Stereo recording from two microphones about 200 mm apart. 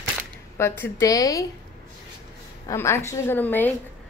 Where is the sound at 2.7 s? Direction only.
10° left (ahead or behind).